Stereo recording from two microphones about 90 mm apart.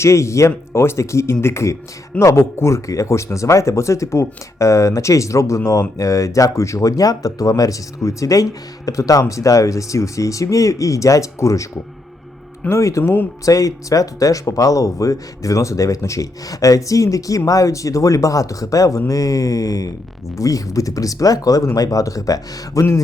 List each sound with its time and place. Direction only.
0.0 s speech: 35° left (ahead or behind)
13.4 s speech: 40° left (ahead or behind)